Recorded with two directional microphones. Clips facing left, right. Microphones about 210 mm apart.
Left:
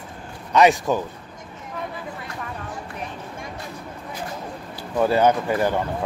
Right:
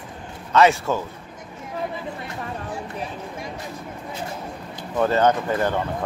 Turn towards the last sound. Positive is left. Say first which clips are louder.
# left 1 dB
turn(degrees=10)  # may be behind; listen again after turning